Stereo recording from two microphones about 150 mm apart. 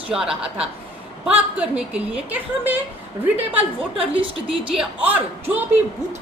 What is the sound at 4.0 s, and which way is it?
Speech, 40° right (ahead or behind).